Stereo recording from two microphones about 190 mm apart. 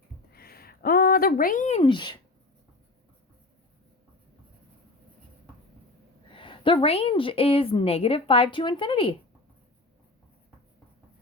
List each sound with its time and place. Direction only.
0.3 s speech: 55° left (ahead or behind); by 2.1 s 25° left (ahead or behind)
6.3 s a woman's voice: 25° left (ahead or behind)